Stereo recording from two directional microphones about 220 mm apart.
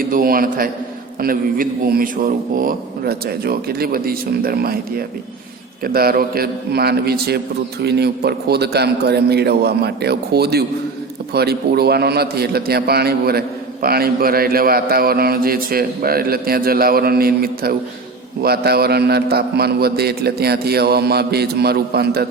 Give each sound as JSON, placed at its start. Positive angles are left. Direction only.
{"t": 0.1, "sound": "a man's voice", "side_deg": -40}